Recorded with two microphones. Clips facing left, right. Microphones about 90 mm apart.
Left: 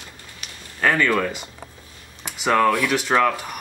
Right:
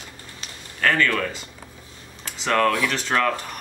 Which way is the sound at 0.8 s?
15° left (ahead or behind).